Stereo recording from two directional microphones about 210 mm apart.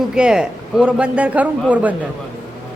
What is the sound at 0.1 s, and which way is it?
A man's voice, 5° right (ahead or behind).